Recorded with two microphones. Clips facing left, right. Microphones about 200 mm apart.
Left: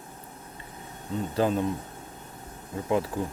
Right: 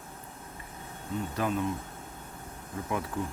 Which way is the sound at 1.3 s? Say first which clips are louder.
Left 6 dB; 30° left (ahead or behind).